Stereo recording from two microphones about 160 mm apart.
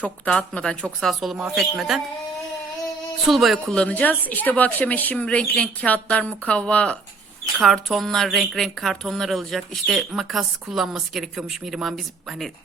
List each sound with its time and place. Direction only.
0.0 s speech: 5° left (ahead or behind)
3.2 s a woman's voice: centre (ahead or behind)